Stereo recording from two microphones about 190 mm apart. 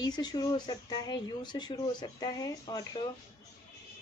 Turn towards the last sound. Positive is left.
turn(degrees=20)  # may be behind; listen again after turning